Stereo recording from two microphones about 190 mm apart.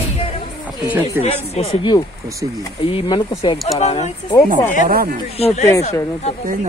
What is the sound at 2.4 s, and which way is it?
Speech, 20° right (ahead or behind).